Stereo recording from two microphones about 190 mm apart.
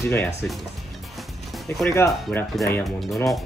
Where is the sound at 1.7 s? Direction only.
10° left (ahead or behind).